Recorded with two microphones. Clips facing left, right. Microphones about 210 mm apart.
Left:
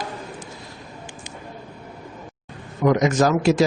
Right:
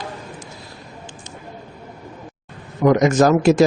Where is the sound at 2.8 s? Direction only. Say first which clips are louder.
Right 4 dB; 50° right (ahead or behind).